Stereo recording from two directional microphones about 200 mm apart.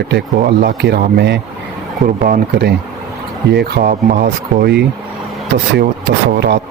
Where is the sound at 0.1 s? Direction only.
55° right (ahead or behind).